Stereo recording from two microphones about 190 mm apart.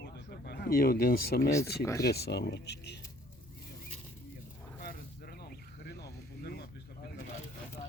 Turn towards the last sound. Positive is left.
turn(degrees=55)  # may be behind; listen again after turning